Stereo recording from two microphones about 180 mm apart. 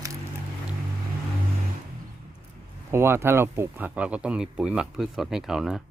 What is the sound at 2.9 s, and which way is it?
Speech, 15° right (ahead or behind).